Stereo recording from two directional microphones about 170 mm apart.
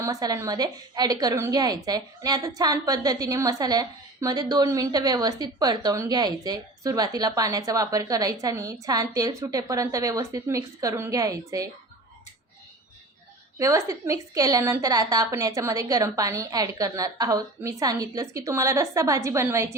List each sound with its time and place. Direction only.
0.0 s a woman's voice: 20° right (ahead or behind)
13.6 s a woman's voice: 20° right (ahead or behind)